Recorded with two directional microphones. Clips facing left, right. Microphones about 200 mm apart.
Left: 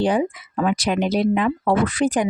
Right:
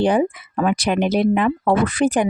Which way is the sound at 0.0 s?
60° right (ahead or behind).